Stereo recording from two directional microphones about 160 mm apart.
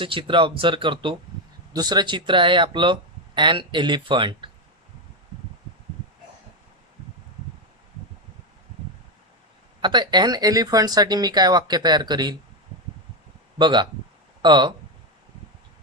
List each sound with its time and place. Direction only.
0.0 s speech: 30° right (ahead or behind)
9.8 s speech: 30° right (ahead or behind)
13.6 s speech: 30° right (ahead or behind)